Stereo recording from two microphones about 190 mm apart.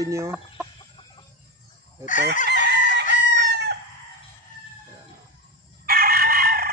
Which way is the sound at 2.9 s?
65° right (ahead or behind).